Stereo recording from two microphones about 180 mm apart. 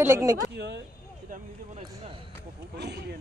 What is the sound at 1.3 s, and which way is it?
Speech, 50° right (ahead or behind).